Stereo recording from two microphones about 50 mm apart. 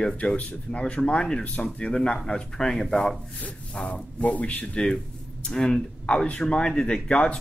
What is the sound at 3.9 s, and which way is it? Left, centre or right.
Speech, left.